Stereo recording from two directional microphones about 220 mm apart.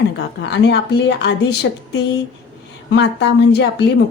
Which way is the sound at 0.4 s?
50° left (ahead or behind).